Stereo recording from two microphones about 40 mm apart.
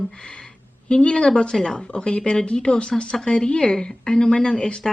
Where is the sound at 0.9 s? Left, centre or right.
Left.